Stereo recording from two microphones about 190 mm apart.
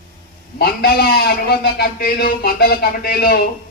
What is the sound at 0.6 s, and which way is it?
A man's voice, 55° left (ahead or behind).